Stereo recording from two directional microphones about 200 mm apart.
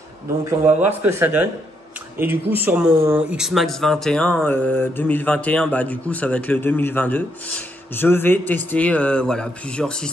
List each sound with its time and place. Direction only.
0.5 s speech: 10° right (ahead or behind)